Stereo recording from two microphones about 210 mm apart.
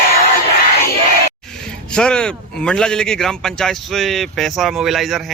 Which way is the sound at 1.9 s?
5° left (ahead or behind).